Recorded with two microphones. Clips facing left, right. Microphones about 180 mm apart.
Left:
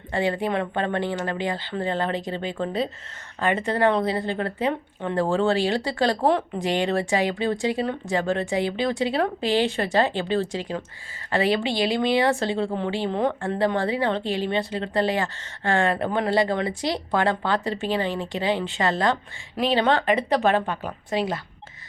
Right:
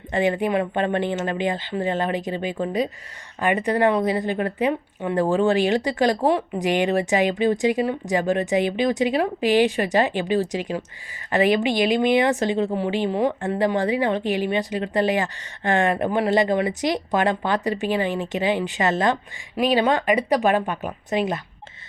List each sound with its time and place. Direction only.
0.1 s speech: 20° right (ahead or behind)